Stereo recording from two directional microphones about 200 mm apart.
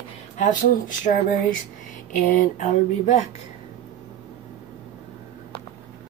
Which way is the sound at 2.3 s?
40° left (ahead or behind).